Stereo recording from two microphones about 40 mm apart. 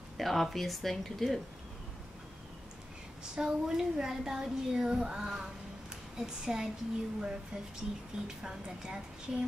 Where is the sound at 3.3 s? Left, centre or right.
Centre.